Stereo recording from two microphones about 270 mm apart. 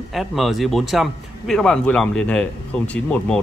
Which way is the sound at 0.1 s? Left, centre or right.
Centre.